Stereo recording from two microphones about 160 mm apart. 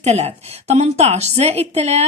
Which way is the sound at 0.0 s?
40° right (ahead or behind).